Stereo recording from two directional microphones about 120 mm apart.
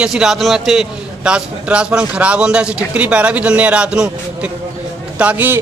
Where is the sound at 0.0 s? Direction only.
5° right (ahead or behind).